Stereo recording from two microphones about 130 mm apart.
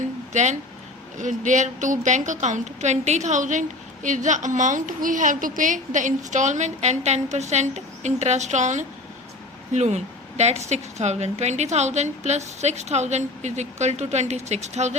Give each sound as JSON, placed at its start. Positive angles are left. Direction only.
{"t": 0.3, "sound": "a woman's voice", "side_deg": -70}